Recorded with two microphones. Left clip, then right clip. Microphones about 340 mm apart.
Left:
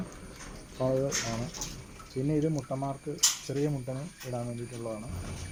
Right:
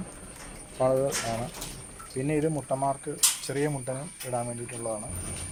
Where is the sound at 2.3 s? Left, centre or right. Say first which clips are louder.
Right 3 dB; right.